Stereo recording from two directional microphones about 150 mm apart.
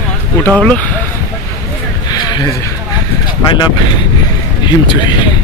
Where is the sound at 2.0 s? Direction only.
25° left (ahead or behind).